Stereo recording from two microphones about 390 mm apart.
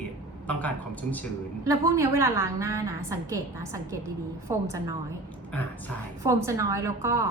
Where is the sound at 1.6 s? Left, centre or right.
Centre.